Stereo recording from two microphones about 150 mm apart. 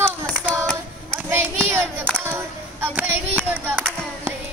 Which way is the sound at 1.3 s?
15° right (ahead or behind).